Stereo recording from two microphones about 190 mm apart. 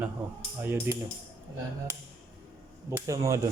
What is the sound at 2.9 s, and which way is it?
Speech, 15° right (ahead or behind).